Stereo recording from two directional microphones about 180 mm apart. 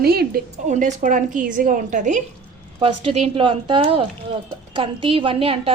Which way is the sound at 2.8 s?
30° right (ahead or behind).